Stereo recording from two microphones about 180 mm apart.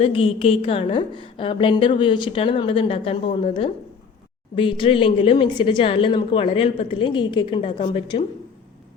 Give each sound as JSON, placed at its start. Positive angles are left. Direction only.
{"t": 0.0, "sound": "a woman's voice", "side_deg": 30}